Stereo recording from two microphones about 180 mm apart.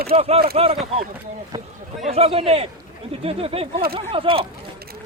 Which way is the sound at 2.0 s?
35° right (ahead or behind).